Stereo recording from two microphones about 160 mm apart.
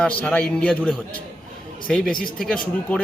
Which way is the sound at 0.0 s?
10° left (ahead or behind).